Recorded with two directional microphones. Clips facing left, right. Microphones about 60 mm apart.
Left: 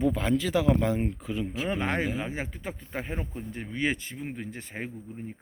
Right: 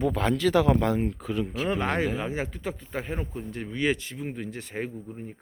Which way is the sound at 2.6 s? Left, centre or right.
Left.